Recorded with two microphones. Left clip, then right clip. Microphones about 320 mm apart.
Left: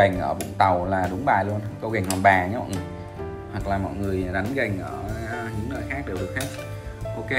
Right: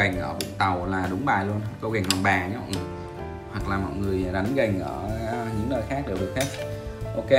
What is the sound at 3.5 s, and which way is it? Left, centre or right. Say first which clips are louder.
Speech: left 2 dB; centre.